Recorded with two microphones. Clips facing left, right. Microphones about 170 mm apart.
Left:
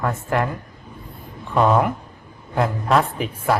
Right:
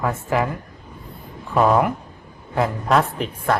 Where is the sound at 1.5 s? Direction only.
5° right (ahead or behind).